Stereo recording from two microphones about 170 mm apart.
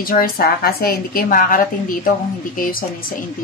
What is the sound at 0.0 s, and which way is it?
Speech, 60° left (ahead or behind).